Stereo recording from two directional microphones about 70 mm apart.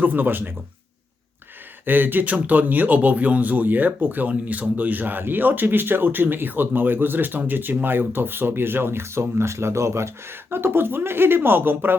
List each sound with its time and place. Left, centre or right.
0.0 s a man's voice: right
1.8 s a man's voice: right